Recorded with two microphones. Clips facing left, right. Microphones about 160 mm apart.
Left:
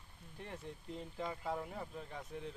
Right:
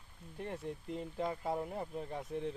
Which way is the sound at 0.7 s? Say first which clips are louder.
Right 7 dB; 50° right (ahead or behind).